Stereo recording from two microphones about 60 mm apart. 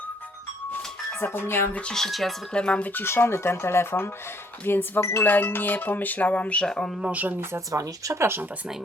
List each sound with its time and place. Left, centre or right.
1.2 s music: left
1.7 s speech: centre
2.0 s speech: centre
2.5 s speech: centre
2.9 s speech: left
4.6 s music: left
5.3 s music: left
6.7 s speech: centre
7.0 s speech: right
7.7 s speech: right